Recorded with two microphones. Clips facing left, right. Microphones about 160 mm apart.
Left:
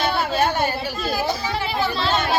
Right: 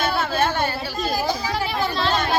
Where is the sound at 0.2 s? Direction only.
15° left (ahead or behind).